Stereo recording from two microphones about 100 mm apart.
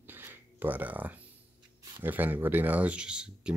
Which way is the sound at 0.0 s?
20° right (ahead or behind).